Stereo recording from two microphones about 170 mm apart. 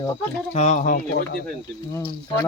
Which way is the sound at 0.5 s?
45° left (ahead or behind).